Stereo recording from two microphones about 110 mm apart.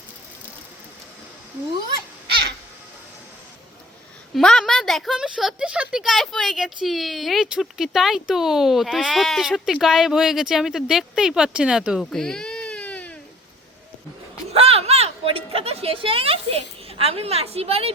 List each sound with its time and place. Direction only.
4.4 s speech: 5° left (ahead or behind)
12.1 s baby cry: 5° left (ahead or behind)
14.5 s a sound: 65° right (ahead or behind)
17.0 s a woman's voice: 65° right (ahead or behind)